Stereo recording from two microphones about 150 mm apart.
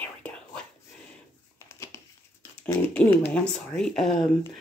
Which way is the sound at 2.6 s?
10° left (ahead or behind).